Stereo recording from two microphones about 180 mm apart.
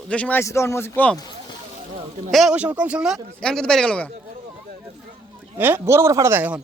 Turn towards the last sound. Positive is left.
turn(degrees=-10)  # may be behind; listen again after turning